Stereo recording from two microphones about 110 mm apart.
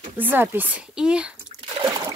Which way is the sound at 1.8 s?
35° right (ahead or behind).